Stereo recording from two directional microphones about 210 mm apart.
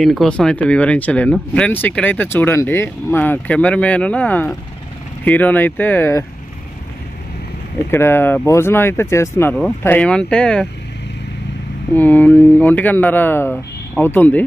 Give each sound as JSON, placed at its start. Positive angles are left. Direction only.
{"t": 0.0, "sound": "speech", "side_deg": 0}
{"t": 7.9, "sound": "speech", "side_deg": 10}
{"t": 11.9, "sound": "speech", "side_deg": 10}